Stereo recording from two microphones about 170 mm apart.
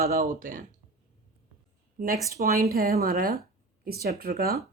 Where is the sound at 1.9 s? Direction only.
55° right (ahead or behind).